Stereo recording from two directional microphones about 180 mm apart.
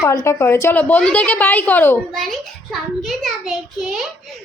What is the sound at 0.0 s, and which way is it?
A woman's voice, 20° left (ahead or behind).